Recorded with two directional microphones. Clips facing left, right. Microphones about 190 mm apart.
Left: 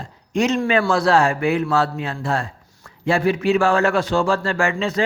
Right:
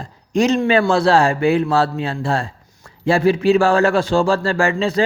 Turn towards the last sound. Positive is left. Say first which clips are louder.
# right 3 dB
turn(degrees=-35)  # may be behind; listen again after turning